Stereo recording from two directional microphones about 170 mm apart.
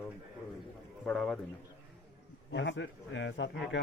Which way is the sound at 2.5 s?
90° left.